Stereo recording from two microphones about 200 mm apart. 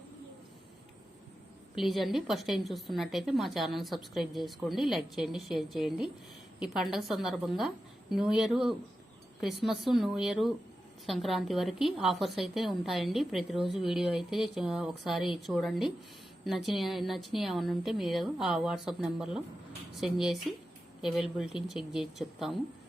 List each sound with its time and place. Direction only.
1.7 s a woman's voice: centre (ahead or behind)